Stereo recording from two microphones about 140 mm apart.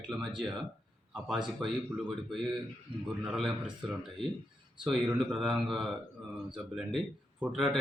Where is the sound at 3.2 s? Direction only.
5° right (ahead or behind).